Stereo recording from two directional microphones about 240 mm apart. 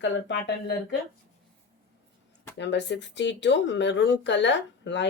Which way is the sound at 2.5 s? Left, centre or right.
Left.